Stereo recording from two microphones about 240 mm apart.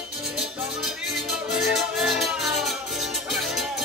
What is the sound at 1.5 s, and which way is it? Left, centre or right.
Music, centre.